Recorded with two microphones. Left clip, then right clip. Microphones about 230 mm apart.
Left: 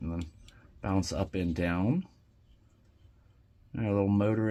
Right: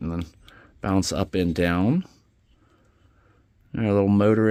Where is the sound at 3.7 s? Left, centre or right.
Right.